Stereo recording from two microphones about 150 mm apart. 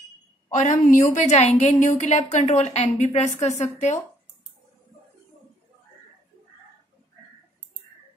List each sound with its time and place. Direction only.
0.5 s a woman's voice: 60° left (ahead or behind)